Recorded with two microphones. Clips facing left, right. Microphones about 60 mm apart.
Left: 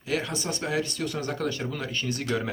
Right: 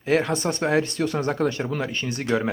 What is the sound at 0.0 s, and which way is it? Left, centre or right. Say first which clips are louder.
Speech: right 8 dB; right.